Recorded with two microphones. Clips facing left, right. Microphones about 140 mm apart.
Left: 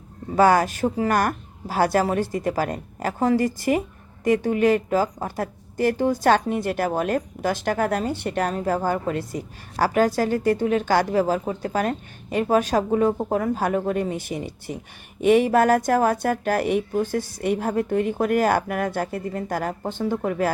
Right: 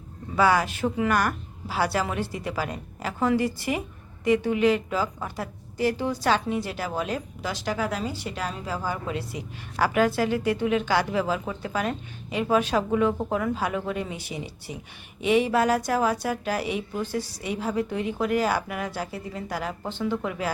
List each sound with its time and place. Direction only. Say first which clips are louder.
0.3 s a woman's voice: left 5 dB; 45° left (ahead or behind)